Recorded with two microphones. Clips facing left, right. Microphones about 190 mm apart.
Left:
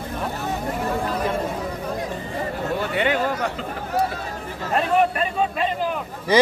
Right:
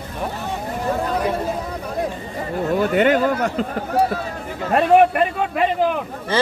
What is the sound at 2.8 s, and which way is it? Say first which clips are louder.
Speech: right 7 dB; 45° right (ahead or behind).